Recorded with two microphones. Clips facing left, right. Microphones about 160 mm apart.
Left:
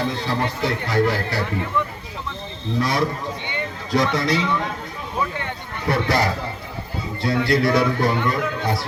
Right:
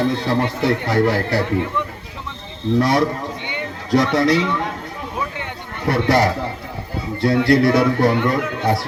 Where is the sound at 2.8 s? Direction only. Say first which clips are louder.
Right 3 dB; 65° right (ahead or behind).